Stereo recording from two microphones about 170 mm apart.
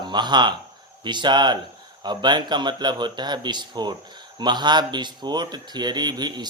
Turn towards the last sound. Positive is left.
turn(degrees=-25)  # may be behind; listen again after turning